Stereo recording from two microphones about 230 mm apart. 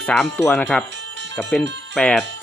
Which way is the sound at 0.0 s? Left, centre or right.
Centre.